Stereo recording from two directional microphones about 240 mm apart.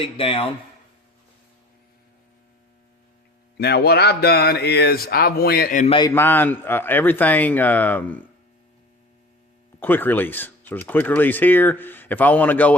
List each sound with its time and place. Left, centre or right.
0.0 s speech: left
3.6 s speech: left
6.0 s speech: centre
9.8 s speech: centre